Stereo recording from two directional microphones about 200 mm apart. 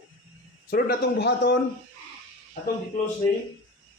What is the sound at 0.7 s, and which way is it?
Speech, 50° left (ahead or behind).